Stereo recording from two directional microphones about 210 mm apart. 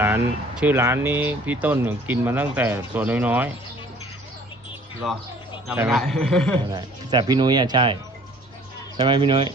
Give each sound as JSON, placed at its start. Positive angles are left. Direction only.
{"t": 0.5, "sound": "speech", "side_deg": -10}
{"t": 5.0, "sound": "speech", "side_deg": 0}
{"t": 6.7, "sound": "speech", "side_deg": -20}
{"t": 9.0, "sound": "speech", "side_deg": -20}